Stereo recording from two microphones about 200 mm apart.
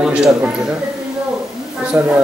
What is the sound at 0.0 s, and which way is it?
Speech, 5° right (ahead or behind).